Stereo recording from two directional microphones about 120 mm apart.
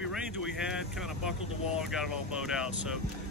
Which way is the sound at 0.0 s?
Centre (ahead or behind).